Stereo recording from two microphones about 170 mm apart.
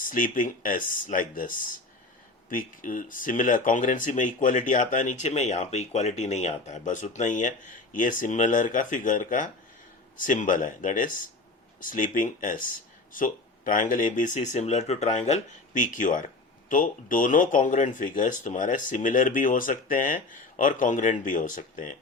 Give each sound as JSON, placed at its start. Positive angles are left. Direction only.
{"t": 0.0, "sound": "speech", "side_deg": 50}